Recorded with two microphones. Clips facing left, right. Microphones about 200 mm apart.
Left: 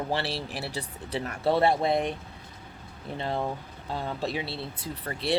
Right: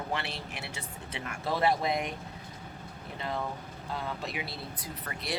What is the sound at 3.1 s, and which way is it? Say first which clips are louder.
Speech: left 5 dB; 30° left (ahead or behind).